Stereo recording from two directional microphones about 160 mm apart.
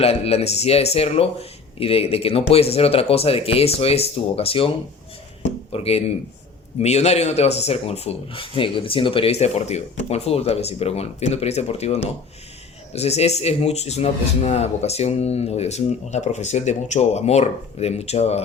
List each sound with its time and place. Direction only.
0.0 s a man's voice: 40° left (ahead or behind)
5.5 s a sound: 40° left (ahead or behind)
6.7 s a man's voice: 40° left (ahead or behind)